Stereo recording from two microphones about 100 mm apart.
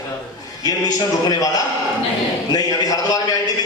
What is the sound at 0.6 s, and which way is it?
A man's voice, 40° left (ahead or behind).